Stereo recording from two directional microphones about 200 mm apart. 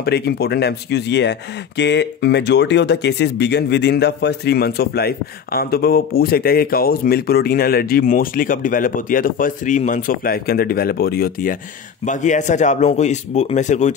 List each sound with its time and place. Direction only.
0.0 s speech: 55° left (ahead or behind)
12.1 s a man's voice: 40° left (ahead or behind)